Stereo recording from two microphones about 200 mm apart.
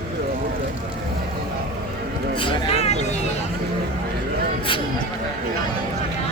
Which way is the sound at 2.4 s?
25° left (ahead or behind).